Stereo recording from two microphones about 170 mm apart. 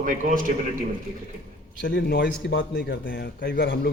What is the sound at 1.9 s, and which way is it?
A man's voice, 80° left.